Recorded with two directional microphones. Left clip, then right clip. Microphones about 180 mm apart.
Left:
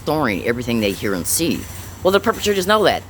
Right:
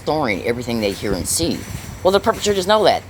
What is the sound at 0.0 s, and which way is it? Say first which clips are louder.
Speech: even; 25° left (ahead or behind).